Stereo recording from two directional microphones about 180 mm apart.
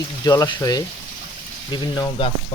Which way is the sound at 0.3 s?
20° left (ahead or behind).